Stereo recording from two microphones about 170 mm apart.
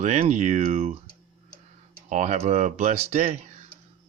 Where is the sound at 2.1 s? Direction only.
45° right (ahead or behind).